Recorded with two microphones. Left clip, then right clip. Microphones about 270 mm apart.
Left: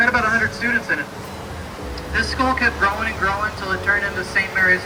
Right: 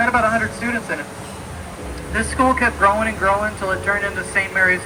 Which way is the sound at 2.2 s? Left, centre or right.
Right.